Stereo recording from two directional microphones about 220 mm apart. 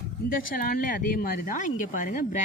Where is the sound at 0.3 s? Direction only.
40° left (ahead or behind).